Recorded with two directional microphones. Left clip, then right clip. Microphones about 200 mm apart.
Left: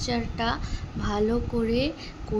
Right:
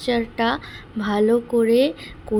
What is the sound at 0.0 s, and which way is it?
Speech, 20° right (ahead or behind).